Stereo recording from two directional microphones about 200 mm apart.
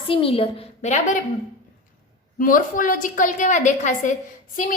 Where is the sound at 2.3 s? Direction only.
45° left (ahead or behind).